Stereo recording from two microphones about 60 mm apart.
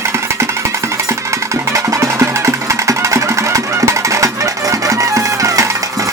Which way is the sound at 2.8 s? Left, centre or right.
Right.